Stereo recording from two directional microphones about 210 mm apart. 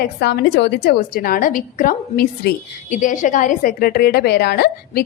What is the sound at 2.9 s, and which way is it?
A woman's voice, 35° left (ahead or behind).